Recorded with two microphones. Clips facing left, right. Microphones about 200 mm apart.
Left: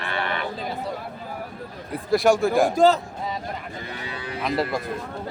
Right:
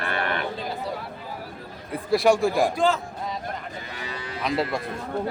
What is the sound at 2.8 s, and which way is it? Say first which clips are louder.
Speech: left 5 dB; 40° left (ahead or behind).